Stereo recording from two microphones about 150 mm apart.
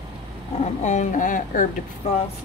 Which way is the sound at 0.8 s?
55° left (ahead or behind).